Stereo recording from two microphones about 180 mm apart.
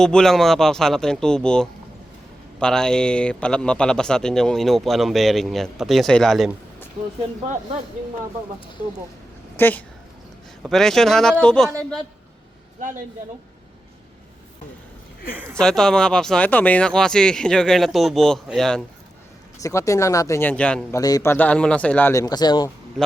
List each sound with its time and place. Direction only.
0.0 s a man's voice: 5° left (ahead or behind)
9.6 s a woman's voice: 10° left (ahead or behind)
15.5 s a man's voice: 5° left (ahead or behind)
19.5 s speech: 20° left (ahead or behind)
21.0 s speech: 20° left (ahead or behind)